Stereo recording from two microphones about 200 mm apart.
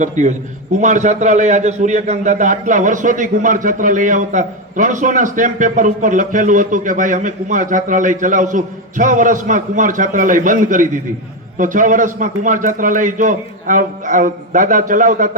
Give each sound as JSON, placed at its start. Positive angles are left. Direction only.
{"t": 0.0, "sound": "a man's voice", "side_deg": -40}